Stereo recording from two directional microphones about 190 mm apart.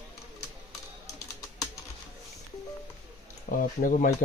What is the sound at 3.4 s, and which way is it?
Speech, 45° left (ahead or behind).